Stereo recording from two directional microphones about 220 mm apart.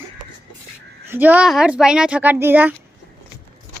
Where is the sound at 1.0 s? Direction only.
10° right (ahead or behind).